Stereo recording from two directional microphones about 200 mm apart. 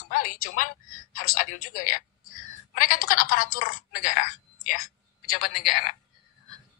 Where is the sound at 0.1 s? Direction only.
45° left (ahead or behind).